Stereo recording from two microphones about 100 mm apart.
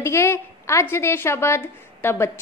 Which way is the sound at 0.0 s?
30° left (ahead or behind).